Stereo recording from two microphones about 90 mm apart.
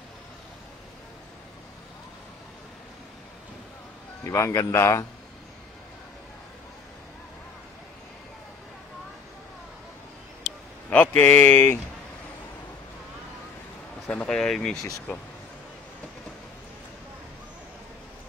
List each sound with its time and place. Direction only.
4.2 s speech: 35° left (ahead or behind)
10.9 s speech: 20° left (ahead or behind)
14.1 s speech: 5° left (ahead or behind)